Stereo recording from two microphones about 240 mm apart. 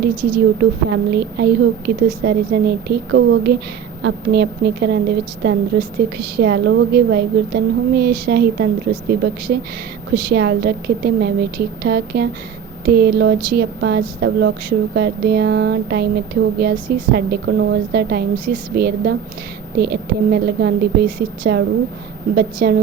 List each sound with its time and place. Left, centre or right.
0.3 s speech: right